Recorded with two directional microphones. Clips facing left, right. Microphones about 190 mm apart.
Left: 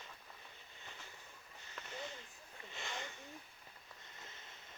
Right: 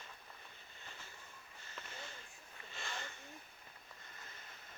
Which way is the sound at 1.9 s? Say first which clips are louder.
Left 5 dB; 20° left (ahead or behind).